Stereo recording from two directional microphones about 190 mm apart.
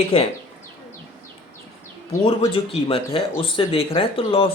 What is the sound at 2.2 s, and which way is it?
Speech, 30° left (ahead or behind).